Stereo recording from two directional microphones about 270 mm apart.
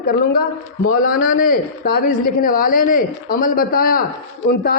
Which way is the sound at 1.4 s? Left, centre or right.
Left.